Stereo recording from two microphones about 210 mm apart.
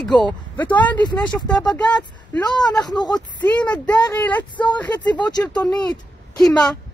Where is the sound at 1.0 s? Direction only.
20° left (ahead or behind).